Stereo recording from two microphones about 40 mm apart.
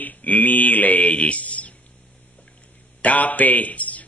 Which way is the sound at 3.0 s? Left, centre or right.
Left.